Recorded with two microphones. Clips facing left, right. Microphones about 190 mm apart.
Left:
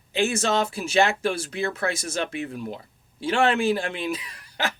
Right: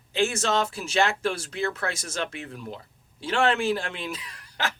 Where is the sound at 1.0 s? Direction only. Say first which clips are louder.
Left 2 dB; 10° left (ahead or behind).